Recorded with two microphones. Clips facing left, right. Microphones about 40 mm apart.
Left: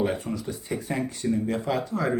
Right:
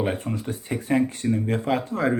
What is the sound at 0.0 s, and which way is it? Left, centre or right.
Speech, right.